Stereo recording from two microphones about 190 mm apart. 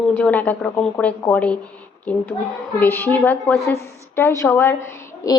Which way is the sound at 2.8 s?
10° left (ahead or behind).